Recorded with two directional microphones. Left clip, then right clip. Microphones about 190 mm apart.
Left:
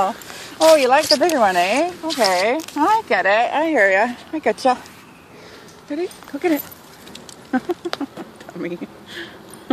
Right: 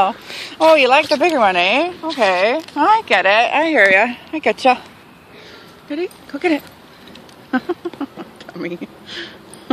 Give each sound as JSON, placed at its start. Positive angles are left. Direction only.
{"t": 0.6, "sound": "speech", "side_deg": -5}
{"t": 5.9, "sound": "speech", "side_deg": -5}